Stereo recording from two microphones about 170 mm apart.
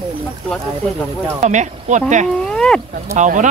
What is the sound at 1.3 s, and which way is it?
Speech, 45° right (ahead or behind).